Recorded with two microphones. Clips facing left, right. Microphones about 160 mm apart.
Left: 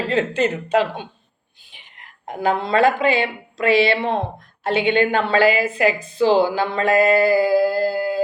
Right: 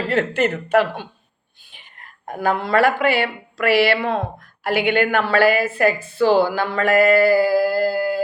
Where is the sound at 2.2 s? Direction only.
20° left (ahead or behind).